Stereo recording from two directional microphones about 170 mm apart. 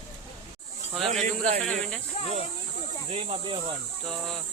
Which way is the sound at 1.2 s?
50° right (ahead or behind).